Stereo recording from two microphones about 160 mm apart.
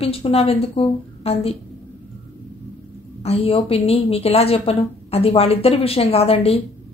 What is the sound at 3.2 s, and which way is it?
A woman's voice, 35° left (ahead or behind).